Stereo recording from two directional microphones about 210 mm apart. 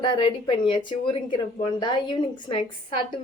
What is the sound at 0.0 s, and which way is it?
Speech, 20° left (ahead or behind).